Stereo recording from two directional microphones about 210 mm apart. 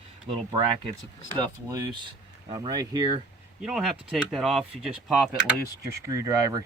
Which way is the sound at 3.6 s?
5° right (ahead or behind).